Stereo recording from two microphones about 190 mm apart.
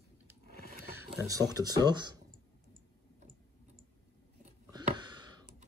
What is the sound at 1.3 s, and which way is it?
Speech, 20° right (ahead or behind).